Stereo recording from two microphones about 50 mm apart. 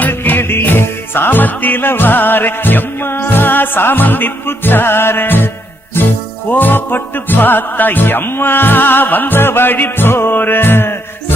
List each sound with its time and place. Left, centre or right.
0.3 s music: left